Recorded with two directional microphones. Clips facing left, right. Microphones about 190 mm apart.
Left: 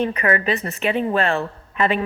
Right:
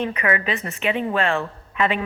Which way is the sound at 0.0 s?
40° left (ahead or behind).